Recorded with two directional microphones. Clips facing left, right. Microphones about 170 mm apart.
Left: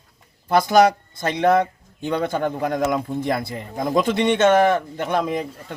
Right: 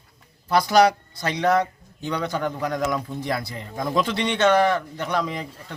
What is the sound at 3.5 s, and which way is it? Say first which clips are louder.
Speech: left 2 dB; 20° left (ahead or behind).